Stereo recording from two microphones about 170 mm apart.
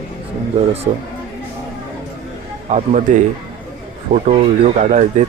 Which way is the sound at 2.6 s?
45° right (ahead or behind).